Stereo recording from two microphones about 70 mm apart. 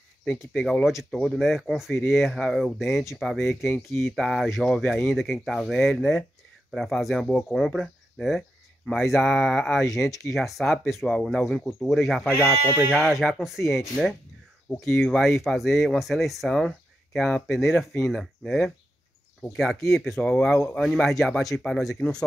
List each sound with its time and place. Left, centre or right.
1.2 s speech: centre
12.4 s speech: left
12.9 s speech: centre